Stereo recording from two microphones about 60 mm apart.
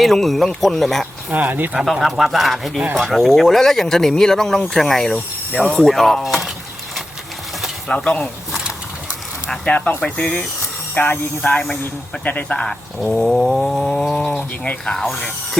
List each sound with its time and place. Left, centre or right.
0.0 s speech: centre
1.3 s speech: right
1.7 s speech: centre
7.9 s speech: centre
9.6 s speech: centre
10.9 s speech: left
13.1 s speech: centre